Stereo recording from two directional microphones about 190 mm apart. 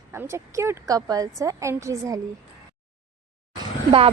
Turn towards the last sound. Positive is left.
turn(degrees=-30)  # may be behind; listen again after turning